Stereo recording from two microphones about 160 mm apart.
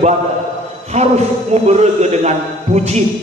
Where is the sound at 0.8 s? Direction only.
45° right (ahead or behind).